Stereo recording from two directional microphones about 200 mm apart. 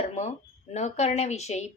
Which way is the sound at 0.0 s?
35° left (ahead or behind).